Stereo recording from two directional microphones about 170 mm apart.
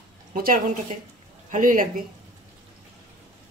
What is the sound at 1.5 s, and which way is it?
Speech, 50° right (ahead or behind).